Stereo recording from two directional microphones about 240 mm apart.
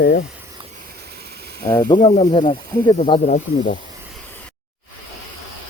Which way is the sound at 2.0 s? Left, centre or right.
Left.